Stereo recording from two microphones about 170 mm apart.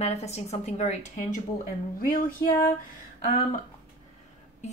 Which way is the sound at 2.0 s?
55° left (ahead or behind).